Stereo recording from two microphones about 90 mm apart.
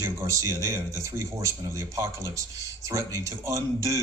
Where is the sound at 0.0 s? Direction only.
35° right (ahead or behind).